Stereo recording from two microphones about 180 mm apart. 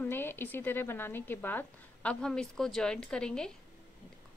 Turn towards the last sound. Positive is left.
turn(degrees=5)  # may be behind; listen again after turning